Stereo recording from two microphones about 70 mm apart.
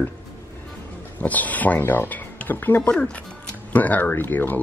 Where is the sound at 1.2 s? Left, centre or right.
Left.